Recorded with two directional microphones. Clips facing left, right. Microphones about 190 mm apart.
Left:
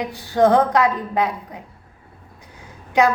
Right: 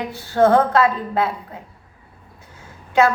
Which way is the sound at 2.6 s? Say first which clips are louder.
Right 1 dB; 15° left (ahead or behind).